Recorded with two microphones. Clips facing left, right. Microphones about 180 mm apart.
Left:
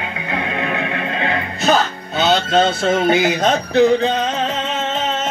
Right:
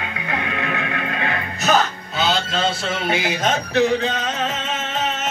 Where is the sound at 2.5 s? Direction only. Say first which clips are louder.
Left 8 dB; 40° left (ahead or behind).